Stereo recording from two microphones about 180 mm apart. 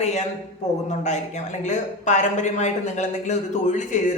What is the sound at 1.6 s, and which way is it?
Speech, 40° left (ahead or behind).